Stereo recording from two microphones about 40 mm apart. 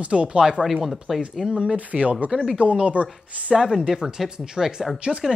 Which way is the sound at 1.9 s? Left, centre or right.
Right.